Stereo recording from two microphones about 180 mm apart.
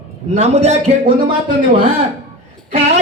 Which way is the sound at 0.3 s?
35° right (ahead or behind).